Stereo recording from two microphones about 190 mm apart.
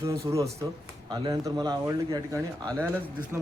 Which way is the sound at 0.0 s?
15° right (ahead or behind).